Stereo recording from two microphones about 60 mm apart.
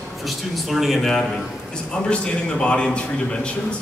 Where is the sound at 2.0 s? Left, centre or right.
Centre.